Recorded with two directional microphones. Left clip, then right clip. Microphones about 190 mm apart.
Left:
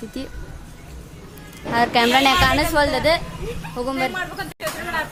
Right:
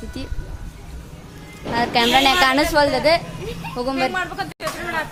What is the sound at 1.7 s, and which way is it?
Speech, 15° left (ahead or behind).